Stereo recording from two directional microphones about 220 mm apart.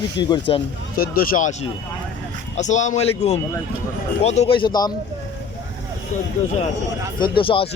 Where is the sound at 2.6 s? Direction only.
30° left (ahead or behind).